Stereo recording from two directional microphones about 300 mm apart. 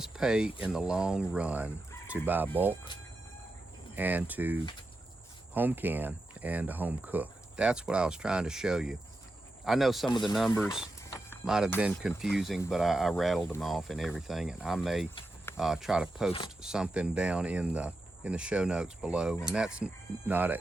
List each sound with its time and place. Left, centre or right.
0.0 s speech: centre
3.9 s speech: centre
10.1 s speech: centre
10.3 s speech: centre